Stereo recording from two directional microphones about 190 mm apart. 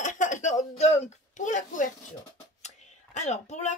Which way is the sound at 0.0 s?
40° left (ahead or behind).